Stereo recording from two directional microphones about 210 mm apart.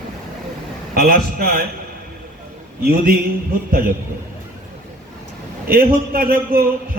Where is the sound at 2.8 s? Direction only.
45° right (ahead or behind).